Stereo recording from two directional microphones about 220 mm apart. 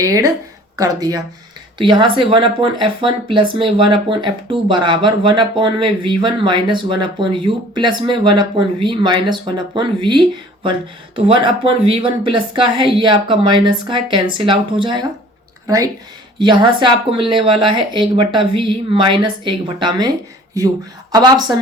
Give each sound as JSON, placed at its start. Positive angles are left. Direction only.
{"t": 0.0, "sound": "speech", "side_deg": -15}
{"t": 21.1, "sound": "speech", "side_deg": -20}